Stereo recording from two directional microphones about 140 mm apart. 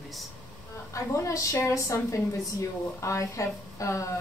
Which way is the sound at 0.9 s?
20° left (ahead or behind).